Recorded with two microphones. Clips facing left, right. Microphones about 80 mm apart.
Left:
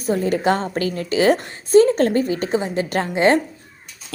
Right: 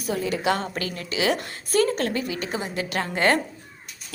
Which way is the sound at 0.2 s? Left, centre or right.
Left.